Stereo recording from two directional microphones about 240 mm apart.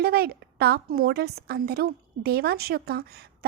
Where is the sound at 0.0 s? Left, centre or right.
Right.